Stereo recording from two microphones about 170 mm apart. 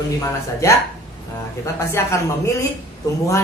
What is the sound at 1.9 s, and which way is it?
Speech, 15° left (ahead or behind).